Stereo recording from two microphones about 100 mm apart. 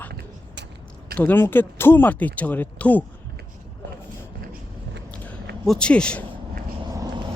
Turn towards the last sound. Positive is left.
turn(degrees=10)  # may be behind; listen again after turning